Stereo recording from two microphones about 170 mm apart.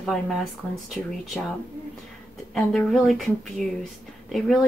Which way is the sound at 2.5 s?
Centre (ahead or behind).